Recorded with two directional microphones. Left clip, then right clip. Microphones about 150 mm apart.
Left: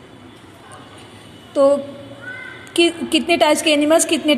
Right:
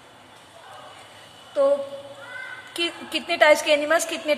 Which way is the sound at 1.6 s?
15° left (ahead or behind).